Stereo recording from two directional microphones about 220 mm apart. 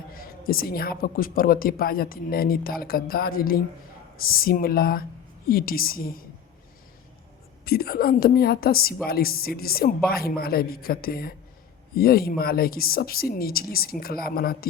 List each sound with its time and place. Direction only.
0.1 s a woman's voice: 40° left (ahead or behind)
7.6 s a woman's voice: 45° left (ahead or behind)